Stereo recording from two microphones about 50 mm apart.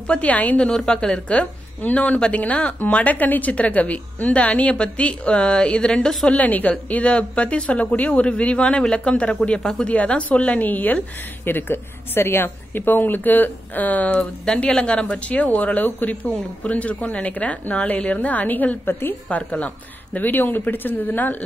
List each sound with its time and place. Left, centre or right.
0.0 s a woman's voice: left
0.6 s a woman's voice: centre
1.8 s a woman's voice: left
6.3 s a woman's voice: left; by 9.8 s centre
9.8 s a woman's voice: left
14.4 s a woman's voice: centre; by 19.1 s left
20.2 s speech: left